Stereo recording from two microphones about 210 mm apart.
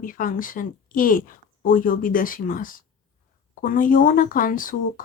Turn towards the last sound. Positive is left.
turn(degrees=40)  # may be behind; listen again after turning